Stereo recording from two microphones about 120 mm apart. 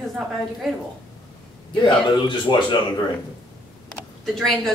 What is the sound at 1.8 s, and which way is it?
Speech, 40° left (ahead or behind).